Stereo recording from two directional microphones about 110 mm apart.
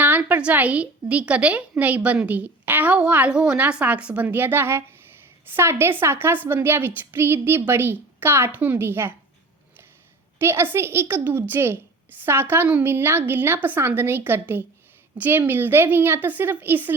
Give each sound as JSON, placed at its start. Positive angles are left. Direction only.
{"t": 0.0, "sound": "a woman's voice", "side_deg": -15}
{"t": 10.3, "sound": "a woman's voice", "side_deg": -20}